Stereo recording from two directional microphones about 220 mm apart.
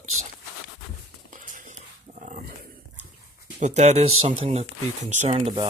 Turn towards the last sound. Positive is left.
turn(degrees=-25)  # may be behind; listen again after turning